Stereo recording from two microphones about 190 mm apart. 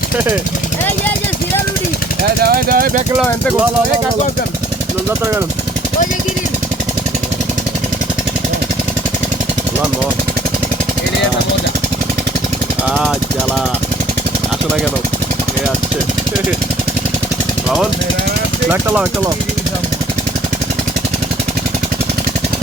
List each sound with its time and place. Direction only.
2.4 s speech: 50° right (ahead or behind)